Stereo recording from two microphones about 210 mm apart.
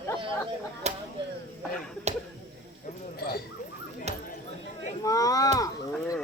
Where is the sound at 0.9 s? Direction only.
30° right (ahead or behind).